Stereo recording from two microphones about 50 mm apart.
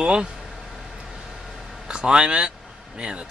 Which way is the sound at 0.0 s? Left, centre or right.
Centre.